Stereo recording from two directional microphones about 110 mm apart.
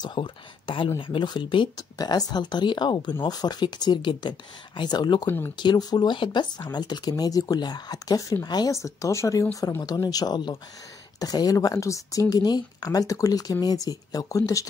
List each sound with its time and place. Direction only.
0.0 s speech: 45° left (ahead or behind)
5.2 s speech: 20° left (ahead or behind)
5.6 s speech: 40° left (ahead or behind)
8.7 s speech: 30° left (ahead or behind)